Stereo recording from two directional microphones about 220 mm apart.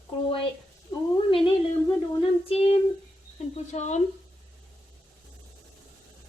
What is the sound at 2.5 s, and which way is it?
Speech, 25° left (ahead or behind).